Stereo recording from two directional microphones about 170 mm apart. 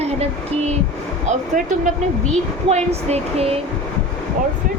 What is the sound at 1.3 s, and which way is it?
Speech, 45° right (ahead or behind).